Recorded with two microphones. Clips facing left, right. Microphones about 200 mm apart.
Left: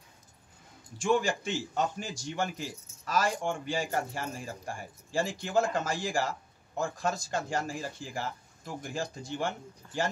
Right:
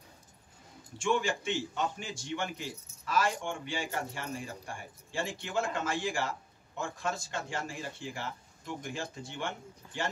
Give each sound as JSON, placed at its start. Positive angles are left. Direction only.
{"t": 0.9, "sound": "a man's voice", "side_deg": 40}